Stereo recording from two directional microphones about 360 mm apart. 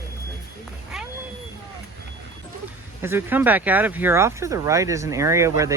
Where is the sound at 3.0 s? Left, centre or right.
Centre.